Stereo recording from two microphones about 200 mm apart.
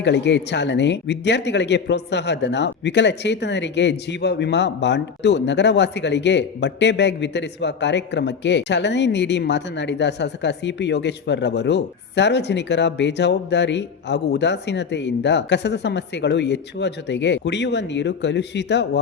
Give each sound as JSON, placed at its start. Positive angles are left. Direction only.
{"t": 0.0, "sound": "speech", "side_deg": 60}